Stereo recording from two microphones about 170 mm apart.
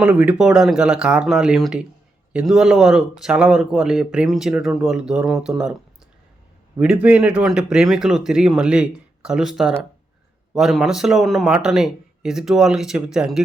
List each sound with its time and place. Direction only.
0.0 s speech: 10° right (ahead or behind)
6.7 s speech: 5° right (ahead or behind)